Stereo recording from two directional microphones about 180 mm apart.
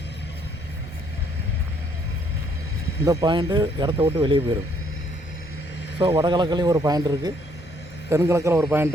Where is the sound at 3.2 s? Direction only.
25° right (ahead or behind).